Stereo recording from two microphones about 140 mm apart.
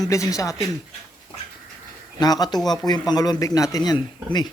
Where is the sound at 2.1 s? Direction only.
30° left (ahead or behind).